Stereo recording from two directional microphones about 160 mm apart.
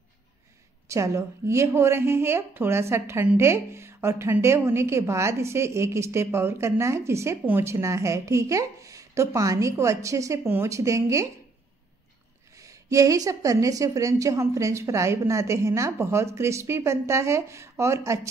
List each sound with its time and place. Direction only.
0.8 s a woman's voice: 20° right (ahead or behind)
12.5 s a woman's voice: 20° right (ahead or behind)